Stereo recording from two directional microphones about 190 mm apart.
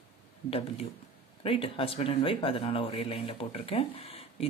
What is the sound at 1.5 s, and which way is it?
Speech, 30° left (ahead or behind).